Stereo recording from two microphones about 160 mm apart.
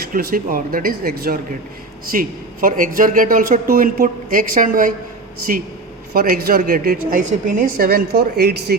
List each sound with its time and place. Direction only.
0.1 s speech: 65° right (ahead or behind)
2.0 s a man's voice: 60° right (ahead or behind)
6.1 s a man's voice: 65° right (ahead or behind)